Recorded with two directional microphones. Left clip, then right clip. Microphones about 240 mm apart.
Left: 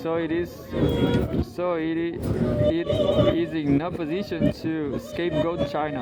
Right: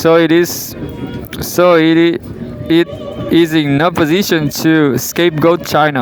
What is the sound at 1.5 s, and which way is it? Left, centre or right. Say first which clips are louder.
Speech: right 19 dB; right.